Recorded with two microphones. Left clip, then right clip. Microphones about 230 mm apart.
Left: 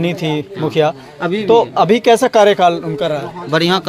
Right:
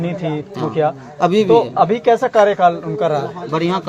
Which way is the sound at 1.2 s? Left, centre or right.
Centre.